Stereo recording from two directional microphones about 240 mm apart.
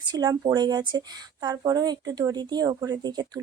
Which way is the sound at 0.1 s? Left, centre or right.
Centre.